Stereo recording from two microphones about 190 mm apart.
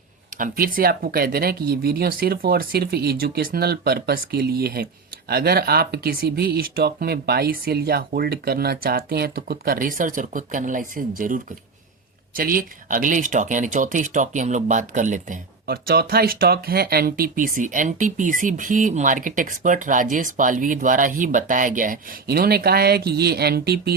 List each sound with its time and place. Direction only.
0.3 s speech: 45° right (ahead or behind)